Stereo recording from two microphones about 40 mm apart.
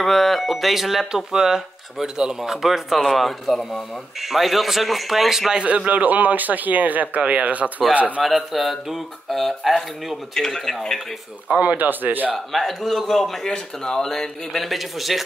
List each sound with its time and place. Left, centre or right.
0.0 s speech: centre
2.4 s speech: centre
3.0 s speech: centre
5.5 s a man's voice: right
5.9 s speech: right
8.2 s speech: centre
10.3 s speech: centre
11.4 s a man's voice: right
11.7 s speech: right
12.6 s speech: centre
13.5 s speech: centre